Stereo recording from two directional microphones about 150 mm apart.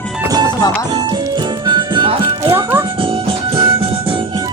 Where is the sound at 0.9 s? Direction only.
30° right (ahead or behind).